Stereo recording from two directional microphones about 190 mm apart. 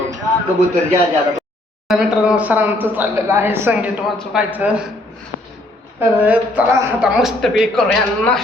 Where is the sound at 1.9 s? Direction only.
5° right (ahead or behind).